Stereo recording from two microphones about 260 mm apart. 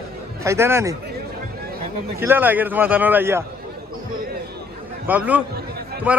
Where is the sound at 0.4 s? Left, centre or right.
Centre.